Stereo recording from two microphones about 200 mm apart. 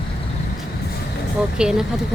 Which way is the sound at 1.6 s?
5° right (ahead or behind).